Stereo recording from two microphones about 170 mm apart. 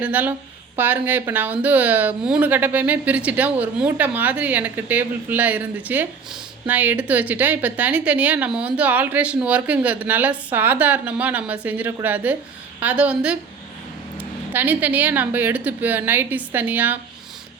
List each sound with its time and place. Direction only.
0.0 s speech: 10° right (ahead or behind)